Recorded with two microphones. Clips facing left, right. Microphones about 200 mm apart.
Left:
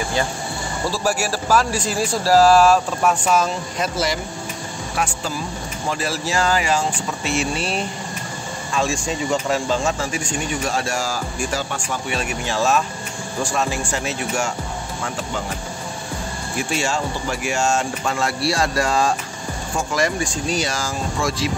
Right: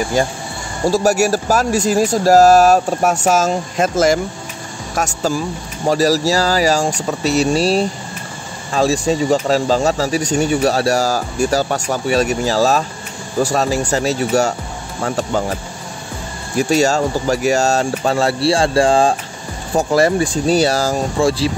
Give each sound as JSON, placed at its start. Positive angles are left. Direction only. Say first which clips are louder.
{"t": 0.8, "sound": "speech", "louder": "right 9 dB", "side_deg": -45}
{"t": 16.5, "sound": "speech", "louder": "right 9 dB", "side_deg": -40}